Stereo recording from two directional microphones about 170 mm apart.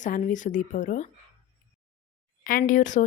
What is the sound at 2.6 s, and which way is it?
Speech, 45° left (ahead or behind).